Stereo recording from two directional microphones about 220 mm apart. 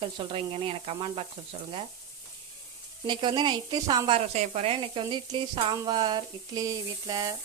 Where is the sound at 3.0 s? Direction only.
20° right (ahead or behind).